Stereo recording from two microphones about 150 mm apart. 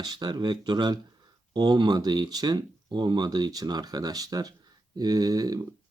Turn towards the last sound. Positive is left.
turn(degrees=-25)  # may be behind; listen again after turning